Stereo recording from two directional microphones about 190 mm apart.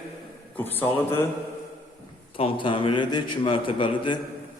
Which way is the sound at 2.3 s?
25° left (ahead or behind).